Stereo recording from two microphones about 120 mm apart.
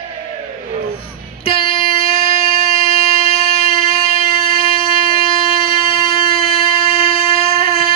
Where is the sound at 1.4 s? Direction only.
50° left (ahead or behind).